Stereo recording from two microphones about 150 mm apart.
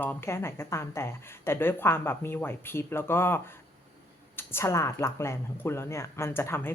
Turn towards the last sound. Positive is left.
turn(degrees=15)  # may be behind; listen again after turning